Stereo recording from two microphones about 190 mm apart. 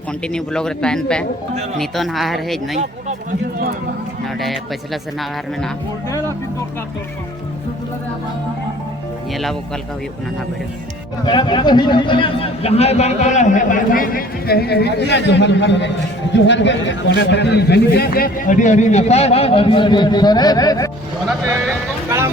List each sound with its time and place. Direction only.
0.3 s speech: 5° left (ahead or behind)
6.1 s speech: 15° left (ahead or behind)
9.3 s speech: centre (ahead or behind)
11.3 s a man's voice: 25° left (ahead or behind)